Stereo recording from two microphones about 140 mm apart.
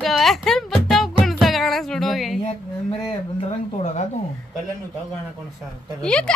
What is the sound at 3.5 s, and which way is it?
Speech, 55° left (ahead or behind).